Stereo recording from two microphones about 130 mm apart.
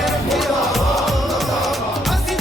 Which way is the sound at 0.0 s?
Centre (ahead or behind).